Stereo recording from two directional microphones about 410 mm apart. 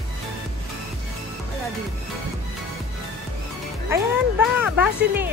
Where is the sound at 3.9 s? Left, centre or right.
Centre.